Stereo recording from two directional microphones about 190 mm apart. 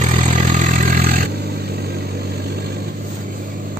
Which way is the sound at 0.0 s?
40° right (ahead or behind).